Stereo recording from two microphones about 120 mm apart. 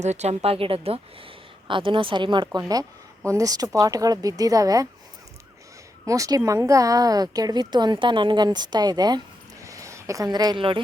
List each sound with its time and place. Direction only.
0.0 s a woman's voice: 70° right (ahead or behind); by 4.9 s 30° right (ahead or behind)
6.1 s a woman's voice: 30° right (ahead or behind); by 10.8 s 45° right (ahead or behind)